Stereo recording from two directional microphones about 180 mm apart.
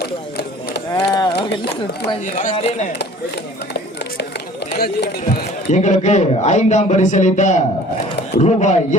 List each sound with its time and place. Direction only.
0.9 s a sound: 20° left (ahead or behind)
1.4 s speech: 70° left (ahead or behind)
2.2 s a man's voice: 45° left (ahead or behind)
5.6 s a man's voice: 40° left (ahead or behind)